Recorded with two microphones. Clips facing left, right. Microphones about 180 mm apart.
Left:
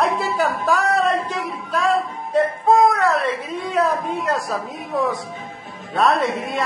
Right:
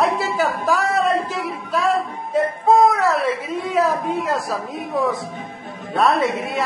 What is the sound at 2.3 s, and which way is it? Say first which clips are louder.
A woman's voice: even; centre (ahead or behind).